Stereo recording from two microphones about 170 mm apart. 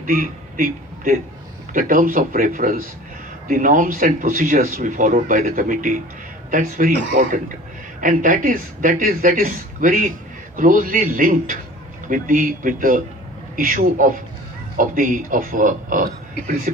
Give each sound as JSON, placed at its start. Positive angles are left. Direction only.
{"t": 0.0, "sound": "speech", "side_deg": -50}